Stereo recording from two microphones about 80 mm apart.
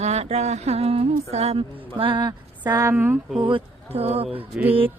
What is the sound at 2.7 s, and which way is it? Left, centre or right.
Speech, right.